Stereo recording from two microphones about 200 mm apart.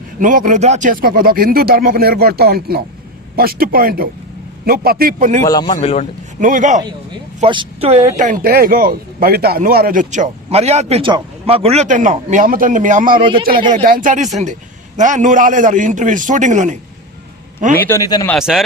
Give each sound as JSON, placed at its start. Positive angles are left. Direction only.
{"t": 0.2, "sound": "speech", "side_deg": -40}
{"t": 5.4, "sound": "a man's voice", "side_deg": 20}
{"t": 6.4, "sound": "speech", "side_deg": -40}
{"t": 7.4, "sound": "speech", "side_deg": -25}
{"t": 17.7, "sound": "a man's voice", "side_deg": 10}
{"t": 18.3, "sound": "speech", "side_deg": 0}